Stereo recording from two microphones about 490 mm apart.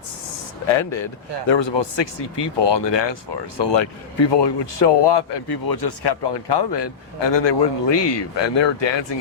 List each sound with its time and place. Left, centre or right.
0.7 s a man's voice: left